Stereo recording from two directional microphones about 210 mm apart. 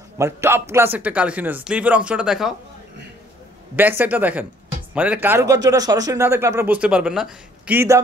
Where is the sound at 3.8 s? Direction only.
10° right (ahead or behind).